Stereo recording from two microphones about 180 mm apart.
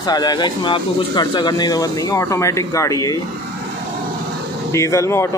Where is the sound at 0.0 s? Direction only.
20° left (ahead or behind).